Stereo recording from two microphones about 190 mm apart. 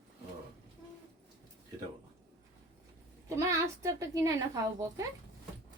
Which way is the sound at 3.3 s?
15° right (ahead or behind).